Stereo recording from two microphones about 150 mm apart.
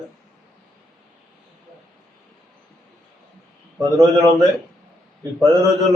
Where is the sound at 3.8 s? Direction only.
25° right (ahead or behind).